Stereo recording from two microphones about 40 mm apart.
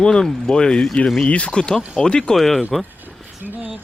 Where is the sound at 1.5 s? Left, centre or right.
Left.